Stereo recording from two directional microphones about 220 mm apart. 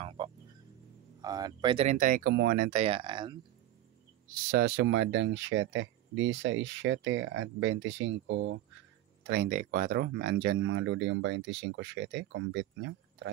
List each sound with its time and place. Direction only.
0.2 s music: 20° right (ahead or behind)
1.2 s speech: 15° right (ahead or behind); by 2.8 s 40° right (ahead or behind)
2.8 s speech: 25° right (ahead or behind)
4.3 s speech: 45° right (ahead or behind)
9.2 s speech: 45° right (ahead or behind)